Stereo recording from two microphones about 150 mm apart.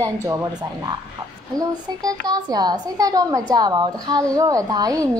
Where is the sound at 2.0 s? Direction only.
25° right (ahead or behind).